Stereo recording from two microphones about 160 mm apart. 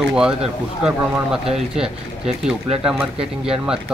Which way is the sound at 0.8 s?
5° right (ahead or behind).